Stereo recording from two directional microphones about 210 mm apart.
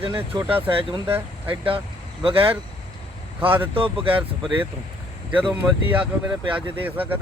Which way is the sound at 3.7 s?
25° right (ahead or behind).